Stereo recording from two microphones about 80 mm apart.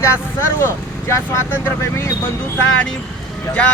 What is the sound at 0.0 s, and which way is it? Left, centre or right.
Speech, left.